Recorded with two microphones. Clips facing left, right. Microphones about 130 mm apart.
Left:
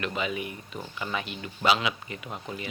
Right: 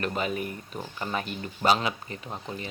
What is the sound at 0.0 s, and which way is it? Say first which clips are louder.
Speech: right 2 dB; 40° right (ahead or behind).